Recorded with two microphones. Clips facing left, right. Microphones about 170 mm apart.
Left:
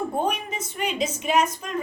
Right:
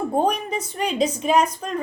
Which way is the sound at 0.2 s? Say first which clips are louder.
Right 5 dB; 35° right (ahead or behind).